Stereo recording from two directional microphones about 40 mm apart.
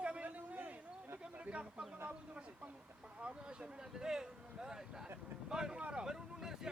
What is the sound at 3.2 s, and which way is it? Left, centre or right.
A man's voice, right.